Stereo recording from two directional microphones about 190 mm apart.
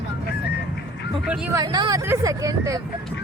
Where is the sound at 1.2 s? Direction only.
5° right (ahead or behind).